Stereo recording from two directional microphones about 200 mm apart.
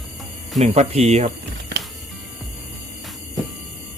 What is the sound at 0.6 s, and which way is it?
Speech, 35° right (ahead or behind).